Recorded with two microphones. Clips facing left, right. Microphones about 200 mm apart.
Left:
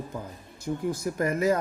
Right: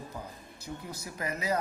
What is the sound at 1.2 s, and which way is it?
Speech, 50° left (ahead or behind).